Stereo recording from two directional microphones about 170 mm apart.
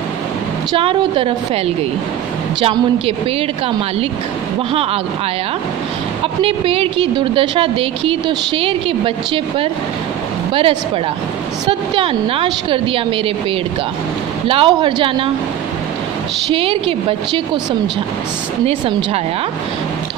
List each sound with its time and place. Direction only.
0.7 s speech: 30° right (ahead or behind)
2.6 s speech: 35° right (ahead or behind)
6.4 s speech: 30° right (ahead or behind)
14.5 s speech: 30° right (ahead or behind)
16.5 s speech: 30° right (ahead or behind)